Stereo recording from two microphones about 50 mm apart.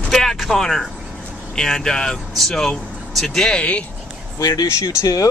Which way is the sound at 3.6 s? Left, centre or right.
Left.